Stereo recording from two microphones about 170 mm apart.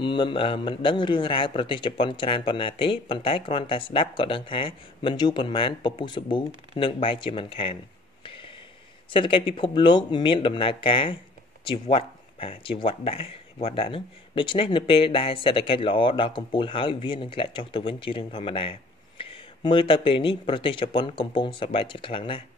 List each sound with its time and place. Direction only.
0.0 s speech: 30° left (ahead or behind)